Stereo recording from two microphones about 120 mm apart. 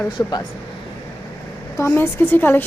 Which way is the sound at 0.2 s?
35° left (ahead or behind).